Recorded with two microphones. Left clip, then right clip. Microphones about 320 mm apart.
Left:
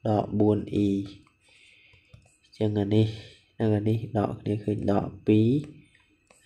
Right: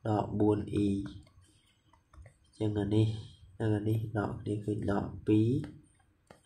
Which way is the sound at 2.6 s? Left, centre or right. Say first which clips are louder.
Left 6 dB; left.